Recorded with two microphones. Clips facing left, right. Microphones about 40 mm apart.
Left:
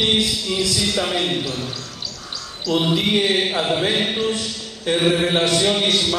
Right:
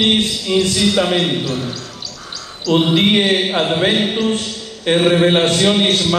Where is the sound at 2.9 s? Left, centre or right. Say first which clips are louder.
Right 5 dB; right.